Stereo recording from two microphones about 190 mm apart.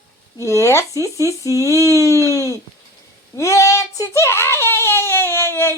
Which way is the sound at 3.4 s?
15° left (ahead or behind).